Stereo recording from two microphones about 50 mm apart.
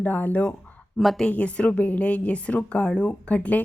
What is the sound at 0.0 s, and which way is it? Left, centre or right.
Speech, left.